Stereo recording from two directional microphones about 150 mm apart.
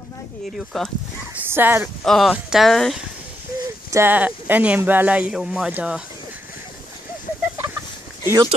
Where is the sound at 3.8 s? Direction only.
15° right (ahead or behind).